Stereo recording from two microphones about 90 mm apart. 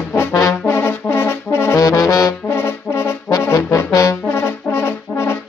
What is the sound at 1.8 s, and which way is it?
Brass instrument, 40° left (ahead or behind).